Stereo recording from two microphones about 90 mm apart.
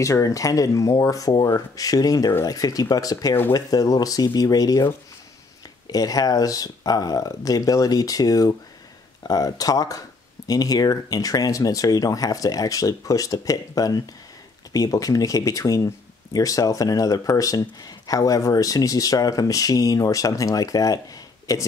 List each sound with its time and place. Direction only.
0.0 s speech: 40° left (ahead or behind)
5.9 s speech: 45° left (ahead or behind)